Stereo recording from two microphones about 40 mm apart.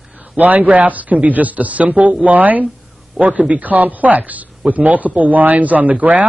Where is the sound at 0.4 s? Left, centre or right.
Right.